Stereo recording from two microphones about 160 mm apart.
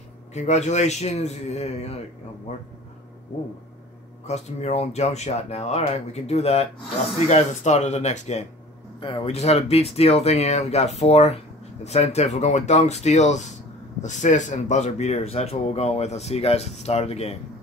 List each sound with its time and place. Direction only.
0.3 s speech: 45° left (ahead or behind)
4.3 s speech: 45° left (ahead or behind)
9.0 s speech: 35° left (ahead or behind)